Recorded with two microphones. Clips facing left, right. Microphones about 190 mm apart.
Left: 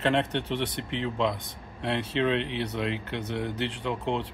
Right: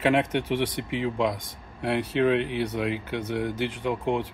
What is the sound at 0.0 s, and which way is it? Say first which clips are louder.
Speech: right 3 dB; 10° right (ahead or behind).